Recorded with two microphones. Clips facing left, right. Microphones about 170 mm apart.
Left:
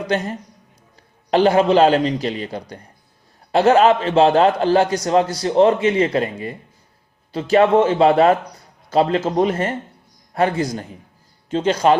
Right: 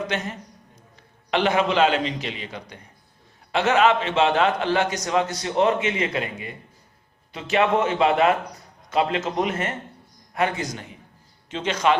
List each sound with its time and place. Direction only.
0.1 s a man's voice: 35° left (ahead or behind)